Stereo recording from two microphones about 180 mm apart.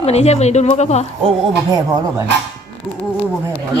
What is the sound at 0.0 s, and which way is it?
A woman's voice, 35° left (ahead or behind).